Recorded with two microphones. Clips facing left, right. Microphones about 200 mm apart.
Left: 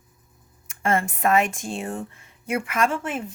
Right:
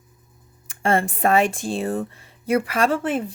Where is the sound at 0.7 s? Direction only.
30° right (ahead or behind).